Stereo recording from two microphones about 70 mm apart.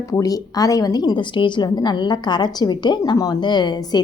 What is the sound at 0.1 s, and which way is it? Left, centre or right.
A woman's voice, left.